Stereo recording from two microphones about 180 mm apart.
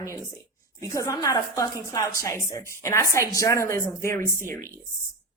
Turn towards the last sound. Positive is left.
turn(degrees=15)  # may be behind; listen again after turning